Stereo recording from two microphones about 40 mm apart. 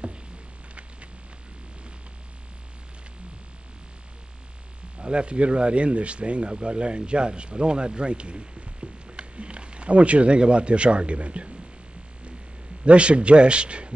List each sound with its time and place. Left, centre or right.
4.9 s speech: right
12.8 s speech: right